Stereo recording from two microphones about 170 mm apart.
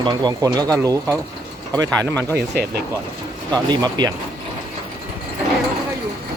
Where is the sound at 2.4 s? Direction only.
70° right (ahead or behind).